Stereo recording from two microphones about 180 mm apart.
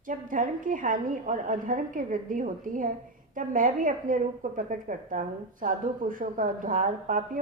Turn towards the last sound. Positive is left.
turn(degrees=-50)  # may be behind; listen again after turning